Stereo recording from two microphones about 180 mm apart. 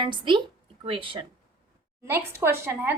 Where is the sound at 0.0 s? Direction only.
25° right (ahead or behind).